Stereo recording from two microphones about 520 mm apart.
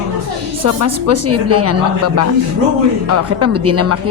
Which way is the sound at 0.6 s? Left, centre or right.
Right.